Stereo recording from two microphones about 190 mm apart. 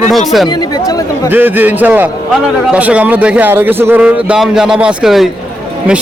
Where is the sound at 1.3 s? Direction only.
10° right (ahead or behind).